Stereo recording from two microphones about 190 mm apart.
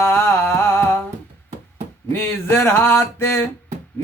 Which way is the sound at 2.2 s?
15° left (ahead or behind).